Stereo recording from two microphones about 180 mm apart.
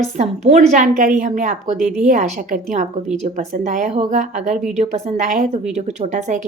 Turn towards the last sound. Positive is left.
turn(degrees=-45)  # may be behind; listen again after turning